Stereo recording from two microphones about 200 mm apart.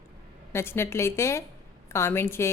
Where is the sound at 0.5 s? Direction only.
10° left (ahead or behind).